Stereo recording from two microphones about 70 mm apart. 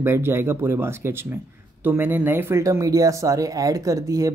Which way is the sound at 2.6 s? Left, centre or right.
Right.